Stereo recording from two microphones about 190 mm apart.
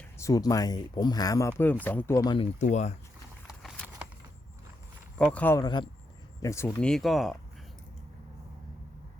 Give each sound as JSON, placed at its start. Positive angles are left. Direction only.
{"t": 0.2, "sound": "speech", "side_deg": 20}
{"t": 2.6, "sound": "speech", "side_deg": 40}
{"t": 3.4, "sound": "horse", "side_deg": -5}
{"t": 5.1, "sound": "speech", "side_deg": 5}